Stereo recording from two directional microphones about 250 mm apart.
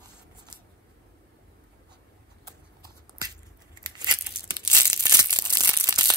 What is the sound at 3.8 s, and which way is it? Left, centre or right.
Tearing, centre.